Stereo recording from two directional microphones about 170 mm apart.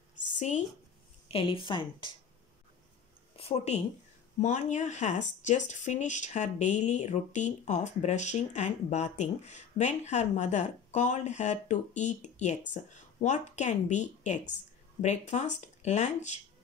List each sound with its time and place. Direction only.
0.4 s speech: 45° left (ahead or behind)
1.3 s speech: 30° left (ahead or behind)
3.3 s a woman's voice: 35° left (ahead or behind)